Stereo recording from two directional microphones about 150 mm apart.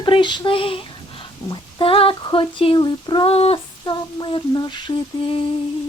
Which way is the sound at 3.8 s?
30° left (ahead or behind).